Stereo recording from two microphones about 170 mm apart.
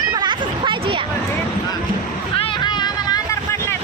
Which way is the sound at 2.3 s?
30° left (ahead or behind).